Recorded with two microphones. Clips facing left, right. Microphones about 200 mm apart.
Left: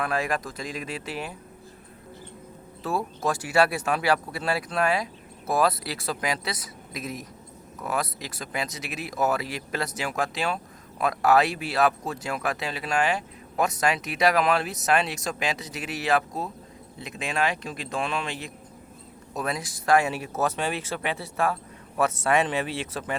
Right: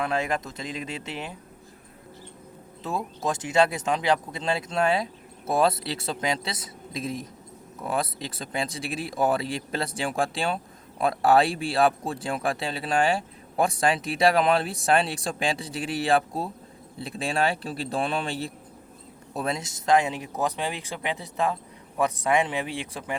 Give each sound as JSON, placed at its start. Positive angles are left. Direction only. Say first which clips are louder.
{"t": 0.0, "sound": "speech", "louder": "even", "side_deg": -25}
{"t": 2.8, "sound": "speech", "louder": "left 2 dB", "side_deg": -20}